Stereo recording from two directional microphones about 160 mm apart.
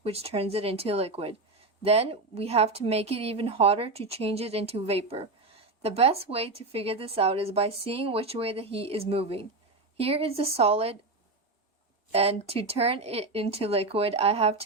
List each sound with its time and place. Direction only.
0.0 s a woman's voice: 40° right (ahead or behind)
12.1 s a woman's voice: 40° right (ahead or behind)